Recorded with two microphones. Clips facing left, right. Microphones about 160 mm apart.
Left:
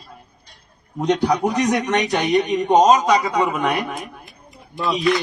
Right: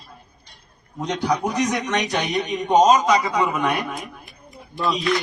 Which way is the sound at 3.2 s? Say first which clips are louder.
Left 2 dB; 20° left (ahead or behind).